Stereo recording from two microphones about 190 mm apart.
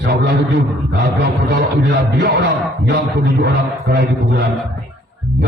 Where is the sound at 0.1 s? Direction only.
60° right (ahead or behind).